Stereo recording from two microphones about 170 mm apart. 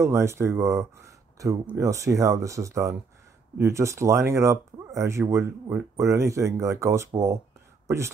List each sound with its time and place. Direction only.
0.0 s speech: 15° right (ahead or behind)